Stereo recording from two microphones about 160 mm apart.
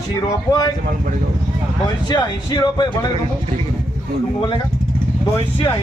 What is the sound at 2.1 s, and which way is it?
Speech, 25° left (ahead or behind).